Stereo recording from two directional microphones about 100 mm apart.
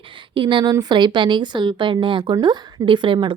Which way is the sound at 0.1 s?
55° right (ahead or behind).